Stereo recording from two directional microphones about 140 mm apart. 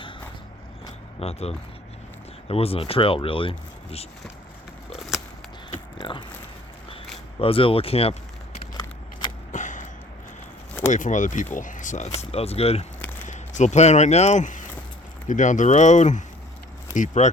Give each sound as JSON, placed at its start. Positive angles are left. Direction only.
{"t": 1.2, "sound": "speech", "side_deg": 45}
{"t": 6.0, "sound": "biting", "side_deg": 35}
{"t": 7.3, "sound": "speech", "side_deg": 40}
{"t": 9.5, "sound": "a sound", "side_deg": 60}
{"t": 10.8, "sound": "speech", "side_deg": 60}
{"t": 13.2, "sound": "speech", "side_deg": 60}